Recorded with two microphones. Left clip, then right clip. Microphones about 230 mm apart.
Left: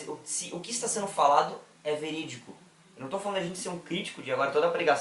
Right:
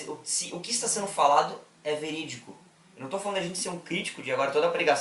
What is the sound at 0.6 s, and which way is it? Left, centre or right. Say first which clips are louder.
Speech: right 2 dB; centre.